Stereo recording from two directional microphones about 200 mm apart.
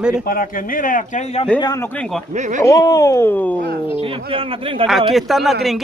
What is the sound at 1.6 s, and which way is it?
Speech, 20° left (ahead or behind).